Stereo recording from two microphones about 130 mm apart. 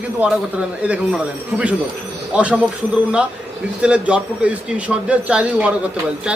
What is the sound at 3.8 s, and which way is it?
A man's voice, 10° right (ahead or behind).